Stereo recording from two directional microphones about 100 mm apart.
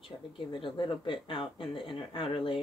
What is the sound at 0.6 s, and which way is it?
Speech, 55° left (ahead or behind).